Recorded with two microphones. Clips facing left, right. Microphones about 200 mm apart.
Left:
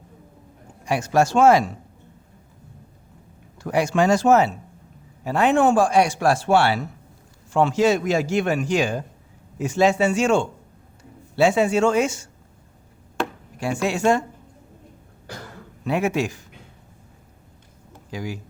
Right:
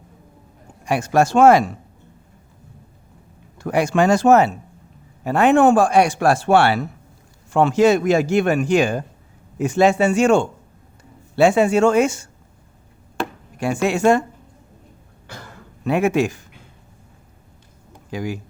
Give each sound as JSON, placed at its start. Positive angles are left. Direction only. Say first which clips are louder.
{"t": 0.9, "sound": "a man's voice", "louder": "right 2 dB", "side_deg": -55}
{"t": 3.6, "sound": "a man's voice", "louder": "right 2 dB", "side_deg": -55}
{"t": 13.8, "sound": "a man's voice", "louder": "right 4 dB", "side_deg": -55}
{"t": 15.8, "sound": "speech", "louder": "right 4 dB", "side_deg": -55}
{"t": 18.1, "sound": "a man's voice", "louder": "right 4 dB", "side_deg": -55}